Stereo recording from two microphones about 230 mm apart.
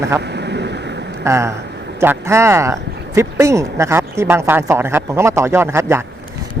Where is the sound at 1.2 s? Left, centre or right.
Centre.